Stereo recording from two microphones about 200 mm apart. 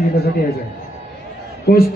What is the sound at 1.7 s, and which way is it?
Speech, 50° left (ahead or behind).